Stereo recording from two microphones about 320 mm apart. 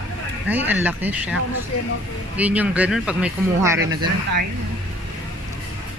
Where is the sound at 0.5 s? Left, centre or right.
Centre.